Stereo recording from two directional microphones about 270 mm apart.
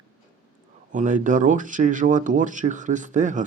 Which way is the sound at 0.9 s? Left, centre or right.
Right.